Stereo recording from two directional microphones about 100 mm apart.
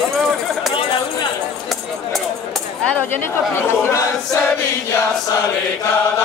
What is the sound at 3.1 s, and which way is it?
Speech, 25° left (ahead or behind).